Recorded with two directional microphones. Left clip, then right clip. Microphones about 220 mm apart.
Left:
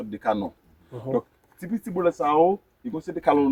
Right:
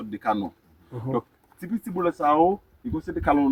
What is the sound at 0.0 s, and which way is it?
Speech, centre (ahead or behind).